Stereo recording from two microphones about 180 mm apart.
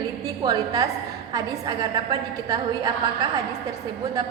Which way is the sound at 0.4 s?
20° right (ahead or behind).